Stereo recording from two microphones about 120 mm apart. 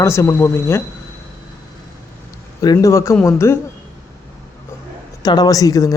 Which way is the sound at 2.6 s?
30° left (ahead or behind).